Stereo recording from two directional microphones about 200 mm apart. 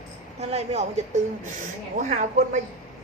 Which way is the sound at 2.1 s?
40° right (ahead or behind).